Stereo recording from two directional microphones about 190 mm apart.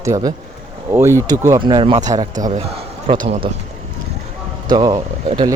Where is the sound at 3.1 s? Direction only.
30° right (ahead or behind).